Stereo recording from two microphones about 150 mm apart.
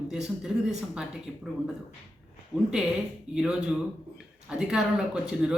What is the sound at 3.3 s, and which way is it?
Speech, 5° right (ahead or behind).